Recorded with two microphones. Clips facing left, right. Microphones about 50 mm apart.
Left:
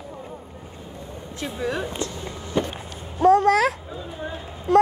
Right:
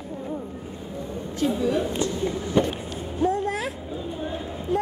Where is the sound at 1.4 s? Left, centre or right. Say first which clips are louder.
Right 7 dB; left.